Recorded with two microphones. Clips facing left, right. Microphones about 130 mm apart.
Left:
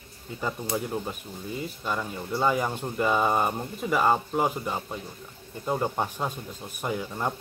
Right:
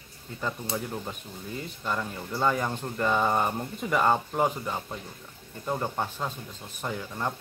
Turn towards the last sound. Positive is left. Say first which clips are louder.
# left 3 dB
turn(degrees=15)  # may be behind; listen again after turning